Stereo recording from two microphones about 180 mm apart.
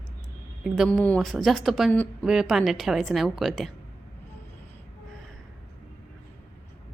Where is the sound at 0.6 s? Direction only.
Centre (ahead or behind).